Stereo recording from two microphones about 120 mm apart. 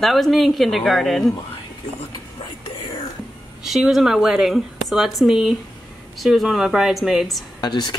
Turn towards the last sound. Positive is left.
turn(degrees=40)  # may be behind; listen again after turning